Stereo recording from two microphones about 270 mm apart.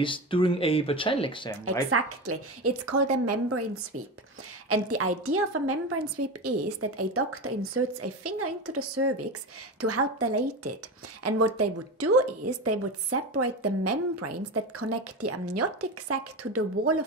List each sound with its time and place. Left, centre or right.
0.0 s speech: centre
1.9 s a woman's voice: right
4.6 s a woman's voice: right